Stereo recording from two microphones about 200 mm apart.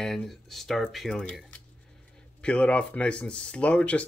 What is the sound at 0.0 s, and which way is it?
Speech, centre (ahead or behind).